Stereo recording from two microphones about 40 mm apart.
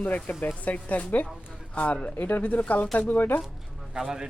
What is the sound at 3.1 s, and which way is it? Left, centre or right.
Speech, left.